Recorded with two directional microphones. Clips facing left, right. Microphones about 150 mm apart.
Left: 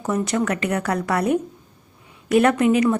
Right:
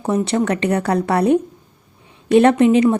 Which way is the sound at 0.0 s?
30° right (ahead or behind).